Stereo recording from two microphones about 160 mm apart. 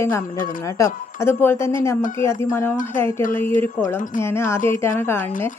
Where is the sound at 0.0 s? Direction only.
15° left (ahead or behind).